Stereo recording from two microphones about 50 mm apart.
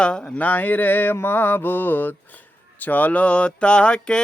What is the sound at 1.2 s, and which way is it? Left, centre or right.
Mantra, left.